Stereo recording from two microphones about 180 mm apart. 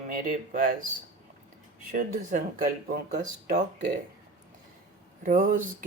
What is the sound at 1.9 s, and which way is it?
Speech, 50° right (ahead or behind).